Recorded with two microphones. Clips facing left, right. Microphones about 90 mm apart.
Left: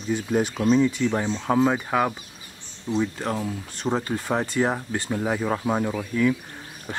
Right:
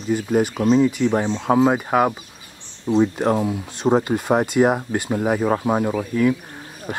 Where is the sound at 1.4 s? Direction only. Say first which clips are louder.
Right 4 dB; 10° right (ahead or behind).